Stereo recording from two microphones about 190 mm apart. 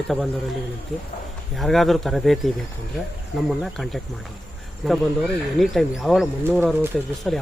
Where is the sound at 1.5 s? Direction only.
Centre (ahead or behind).